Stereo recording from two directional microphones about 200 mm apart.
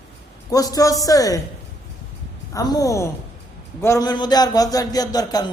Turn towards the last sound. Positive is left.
turn(degrees=20)  # may be behind; listen again after turning